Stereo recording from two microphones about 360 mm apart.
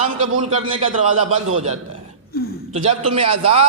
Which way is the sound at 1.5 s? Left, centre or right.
Right.